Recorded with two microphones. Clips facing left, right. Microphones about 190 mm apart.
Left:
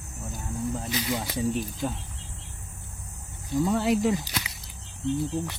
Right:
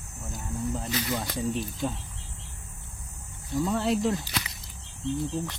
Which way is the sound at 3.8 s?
5° left (ahead or behind).